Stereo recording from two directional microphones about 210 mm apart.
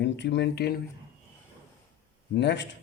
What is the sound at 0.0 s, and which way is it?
Speech, 55° left (ahead or behind).